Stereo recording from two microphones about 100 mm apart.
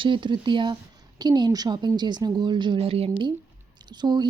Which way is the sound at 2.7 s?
80° right.